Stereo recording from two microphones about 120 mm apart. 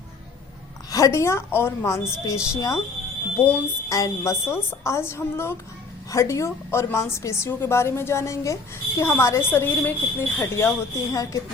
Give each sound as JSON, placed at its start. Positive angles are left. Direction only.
{"t": 0.9, "sound": "a woman's voice", "side_deg": 25}
{"t": 3.3, "sound": "speech", "side_deg": 15}
{"t": 3.8, "sound": "a woman's voice", "side_deg": 30}